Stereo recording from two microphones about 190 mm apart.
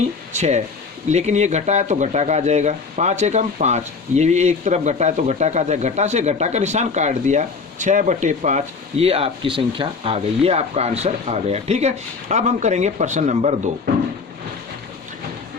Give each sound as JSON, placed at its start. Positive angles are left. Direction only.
{"t": 0.3, "sound": "speech", "side_deg": -35}